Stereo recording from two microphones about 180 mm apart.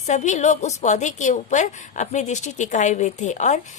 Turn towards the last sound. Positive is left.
turn(degrees=40)  # may be behind; listen again after turning